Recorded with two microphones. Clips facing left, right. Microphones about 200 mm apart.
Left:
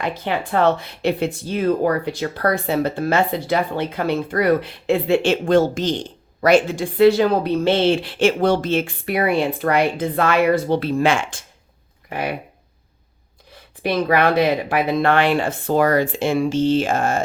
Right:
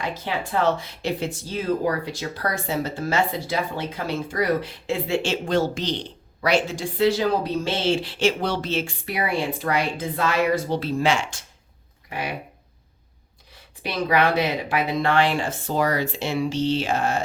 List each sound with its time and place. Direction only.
0.0 s speech: 60° left (ahead or behind)
13.8 s speech: 55° left (ahead or behind)